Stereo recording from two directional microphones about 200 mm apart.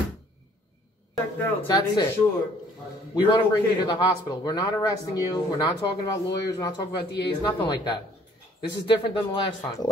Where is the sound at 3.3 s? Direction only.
20° left (ahead or behind).